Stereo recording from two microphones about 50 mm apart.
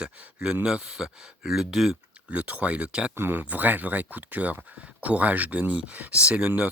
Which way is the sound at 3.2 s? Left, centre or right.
Right.